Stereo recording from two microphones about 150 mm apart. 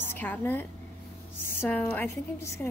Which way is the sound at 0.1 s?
15° left (ahead or behind).